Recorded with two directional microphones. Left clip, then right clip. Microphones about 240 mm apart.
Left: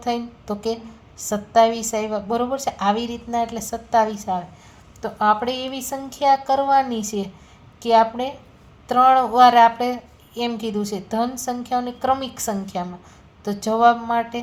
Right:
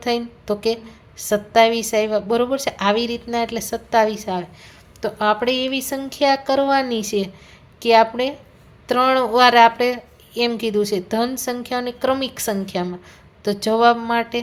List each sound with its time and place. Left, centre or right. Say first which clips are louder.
0.0 s a woman's voice: right 3 dB; right